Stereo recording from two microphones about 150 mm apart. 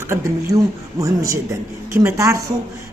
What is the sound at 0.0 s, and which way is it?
A woman's voice, 20° right (ahead or behind).